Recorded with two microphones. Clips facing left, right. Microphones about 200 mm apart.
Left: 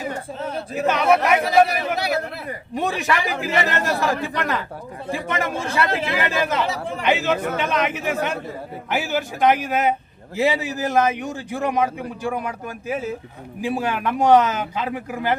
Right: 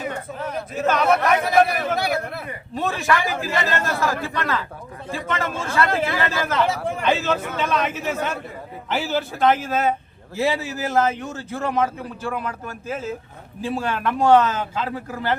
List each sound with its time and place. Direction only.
0.3 s a sound: 30° left (ahead or behind)
0.9 s a man's voice: 10° left (ahead or behind)
1.5 s a man's voice: 55° right (ahead or behind)
2.7 s a man's voice: 15° left (ahead or behind)